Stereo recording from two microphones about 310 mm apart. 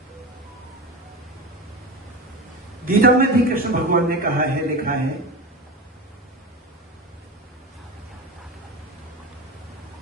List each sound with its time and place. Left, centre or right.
2.8 s a man's voice: right